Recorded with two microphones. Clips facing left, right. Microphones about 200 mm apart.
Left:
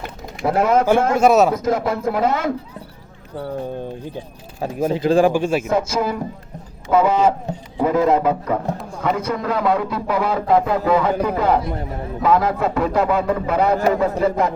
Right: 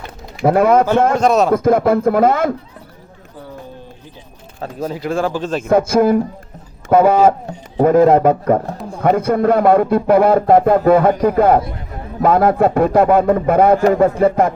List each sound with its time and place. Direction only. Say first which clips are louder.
0.4 s speech: right 5 dB; 55° right (ahead or behind)
1.1 s a man's voice: even; 5° left (ahead or behind)
1.5 s speech: right 7 dB; 55° right (ahead or behind)
4.6 s a man's voice: left 4 dB; 10° left (ahead or behind)
5.6 s speech: right 7 dB; 55° right (ahead or behind)